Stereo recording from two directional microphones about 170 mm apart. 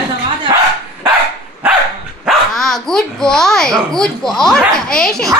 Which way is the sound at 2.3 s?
Centre (ahead or behind).